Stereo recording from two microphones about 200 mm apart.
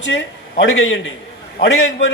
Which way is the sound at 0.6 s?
70° left (ahead or behind).